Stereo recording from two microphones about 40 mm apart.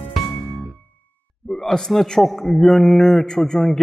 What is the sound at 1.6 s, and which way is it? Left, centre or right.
A man's voice, centre.